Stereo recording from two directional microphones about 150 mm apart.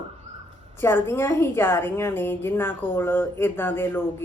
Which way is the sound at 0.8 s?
15° left (ahead or behind).